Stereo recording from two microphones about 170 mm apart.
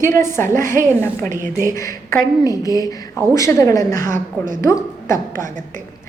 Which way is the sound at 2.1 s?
20° left (ahead or behind).